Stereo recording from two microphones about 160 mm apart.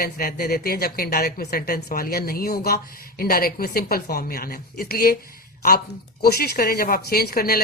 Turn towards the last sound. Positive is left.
turn(degrees=70)  # may be behind; listen again after turning